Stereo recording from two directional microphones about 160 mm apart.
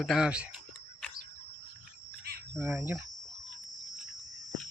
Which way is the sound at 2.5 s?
15° right (ahead or behind).